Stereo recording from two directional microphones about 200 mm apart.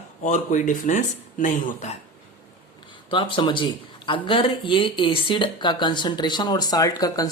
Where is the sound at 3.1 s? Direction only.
25° left (ahead or behind).